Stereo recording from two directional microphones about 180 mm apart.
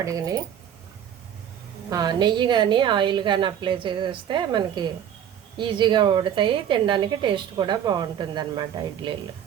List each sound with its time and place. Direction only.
0.0 s a woman's voice: 20° right (ahead or behind)
1.9 s a woman's voice: 20° right (ahead or behind)